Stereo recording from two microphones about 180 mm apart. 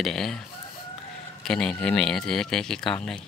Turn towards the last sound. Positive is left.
turn(degrees=5)  # may be behind; listen again after turning